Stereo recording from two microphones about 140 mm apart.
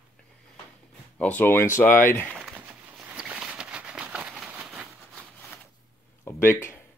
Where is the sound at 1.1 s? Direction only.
10° left (ahead or behind).